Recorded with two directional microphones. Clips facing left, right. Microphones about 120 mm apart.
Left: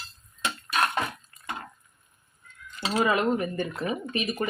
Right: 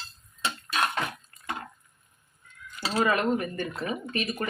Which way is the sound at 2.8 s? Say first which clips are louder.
Left 1 dB; 20° left (ahead or behind).